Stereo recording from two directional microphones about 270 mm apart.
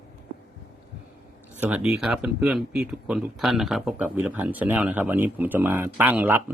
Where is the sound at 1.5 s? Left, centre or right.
Centre.